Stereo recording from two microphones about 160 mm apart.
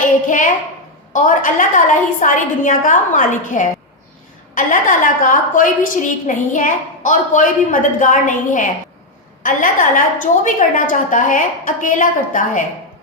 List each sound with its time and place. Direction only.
0.3 s a woman's voice: 50° left (ahead or behind)